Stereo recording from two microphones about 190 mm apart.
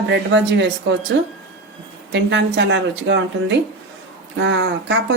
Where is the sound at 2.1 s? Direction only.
65° right (ahead or behind).